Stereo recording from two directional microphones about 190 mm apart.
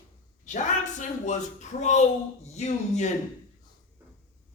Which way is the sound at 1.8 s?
35° left (ahead or behind).